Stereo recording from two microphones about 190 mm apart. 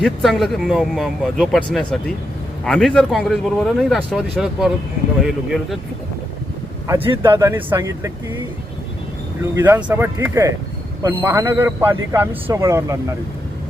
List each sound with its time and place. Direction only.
0.0 s speech: centre (ahead or behind)
7.2 s a man's voice: 15° right (ahead or behind)
9.4 s a man's voice: 10° right (ahead or behind)